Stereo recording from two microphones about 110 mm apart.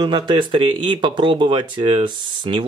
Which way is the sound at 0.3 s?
45° right (ahead or behind).